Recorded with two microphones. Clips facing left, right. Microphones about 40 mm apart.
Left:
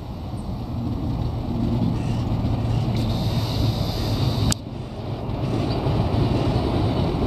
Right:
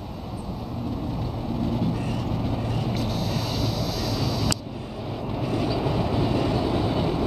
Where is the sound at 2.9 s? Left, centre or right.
Left.